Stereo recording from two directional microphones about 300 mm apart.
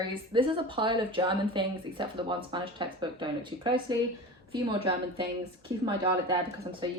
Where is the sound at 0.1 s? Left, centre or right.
Centre.